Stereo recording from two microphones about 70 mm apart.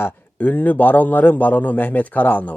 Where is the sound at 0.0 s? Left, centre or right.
Left.